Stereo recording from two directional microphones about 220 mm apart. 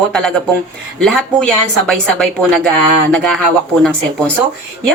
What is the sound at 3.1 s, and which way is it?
Speech, centre (ahead or behind).